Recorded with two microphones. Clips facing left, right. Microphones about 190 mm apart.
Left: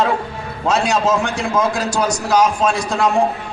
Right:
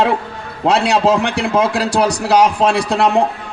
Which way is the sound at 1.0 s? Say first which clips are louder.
Right 3 dB; 65° right (ahead or behind).